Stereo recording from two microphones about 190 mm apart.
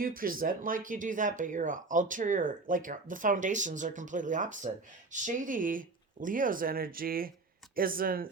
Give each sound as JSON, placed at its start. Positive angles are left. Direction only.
{"t": 0.0, "sound": "speech", "side_deg": -50}